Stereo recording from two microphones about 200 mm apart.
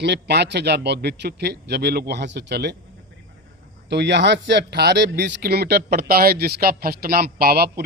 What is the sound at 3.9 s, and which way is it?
A man's voice, 60° right (ahead or behind).